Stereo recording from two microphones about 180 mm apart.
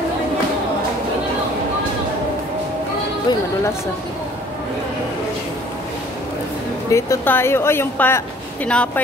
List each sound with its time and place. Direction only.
3.3 s speech: 25° left (ahead or behind)
6.9 s speech: 15° left (ahead or behind)